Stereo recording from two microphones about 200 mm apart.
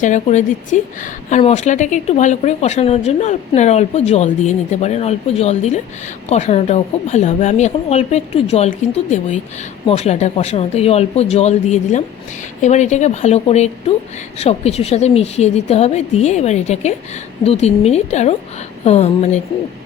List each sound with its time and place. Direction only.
0.0 s speech: 35° left (ahead or behind)